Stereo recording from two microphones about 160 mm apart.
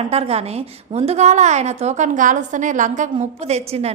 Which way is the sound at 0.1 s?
40° right (ahead or behind).